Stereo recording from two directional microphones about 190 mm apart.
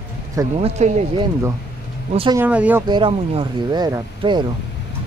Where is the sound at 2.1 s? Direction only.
30° right (ahead or behind).